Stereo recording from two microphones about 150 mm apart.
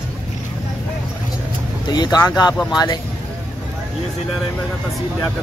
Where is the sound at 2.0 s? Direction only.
25° left (ahead or behind).